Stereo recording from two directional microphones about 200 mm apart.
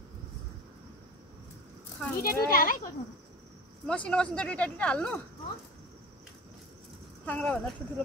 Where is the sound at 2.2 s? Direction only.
45° left (ahead or behind).